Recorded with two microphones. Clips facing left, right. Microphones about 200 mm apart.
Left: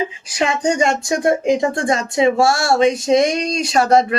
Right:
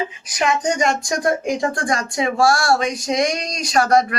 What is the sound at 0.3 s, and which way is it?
Speech, 30° left (ahead or behind).